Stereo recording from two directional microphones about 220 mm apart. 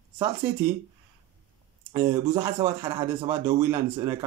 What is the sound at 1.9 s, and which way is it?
Speech, 15° right (ahead or behind).